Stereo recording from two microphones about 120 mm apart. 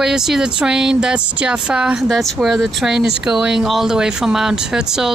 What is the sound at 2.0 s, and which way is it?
Speech, 5° left (ahead or behind).